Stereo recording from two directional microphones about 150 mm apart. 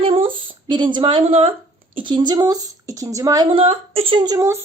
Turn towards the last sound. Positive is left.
turn(degrees=-25)  # may be behind; listen again after turning